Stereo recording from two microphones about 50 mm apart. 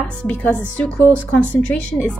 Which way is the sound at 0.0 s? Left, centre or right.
Left.